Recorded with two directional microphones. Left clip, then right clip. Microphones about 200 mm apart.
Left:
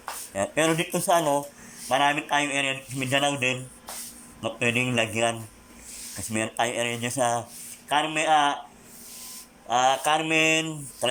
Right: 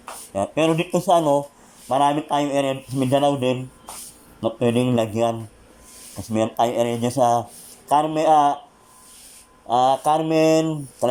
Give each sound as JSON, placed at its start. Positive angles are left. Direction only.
{"t": 0.3, "sound": "speech", "side_deg": -15}
{"t": 9.6, "sound": "speech", "side_deg": -20}